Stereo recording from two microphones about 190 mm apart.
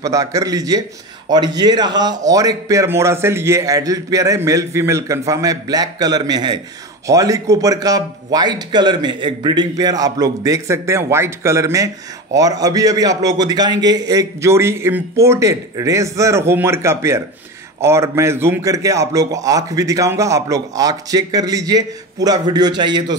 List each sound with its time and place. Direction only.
0.0 s a man's voice: 15° right (ahead or behind)